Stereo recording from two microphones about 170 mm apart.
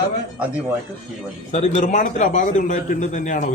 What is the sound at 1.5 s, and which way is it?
A man's voice, 45° left (ahead or behind).